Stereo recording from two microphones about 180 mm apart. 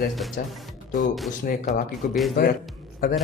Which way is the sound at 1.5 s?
50° left (ahead or behind).